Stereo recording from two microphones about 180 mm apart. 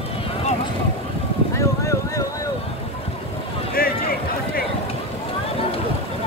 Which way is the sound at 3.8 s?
55° left (ahead or behind).